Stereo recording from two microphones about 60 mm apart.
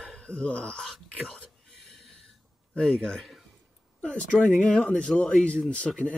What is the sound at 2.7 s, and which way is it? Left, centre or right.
Speech, centre.